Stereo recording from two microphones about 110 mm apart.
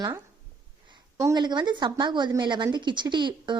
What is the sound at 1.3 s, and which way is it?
Speech, 45° right (ahead or behind).